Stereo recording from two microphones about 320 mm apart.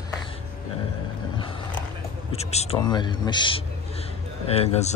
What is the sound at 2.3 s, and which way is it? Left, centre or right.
A man's voice, centre.